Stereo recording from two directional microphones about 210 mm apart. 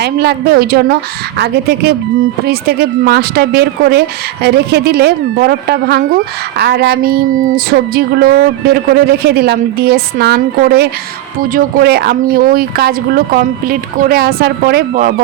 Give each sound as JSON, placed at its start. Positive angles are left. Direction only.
{"t": 0.0, "sound": "speech", "side_deg": -50}